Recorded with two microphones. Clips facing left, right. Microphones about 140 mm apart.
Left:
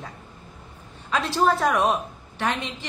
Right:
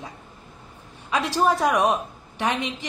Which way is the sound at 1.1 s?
15° right (ahead or behind).